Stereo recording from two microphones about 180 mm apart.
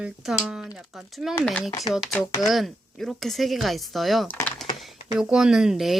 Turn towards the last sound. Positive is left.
turn(degrees=0)  # may be behind; listen again after turning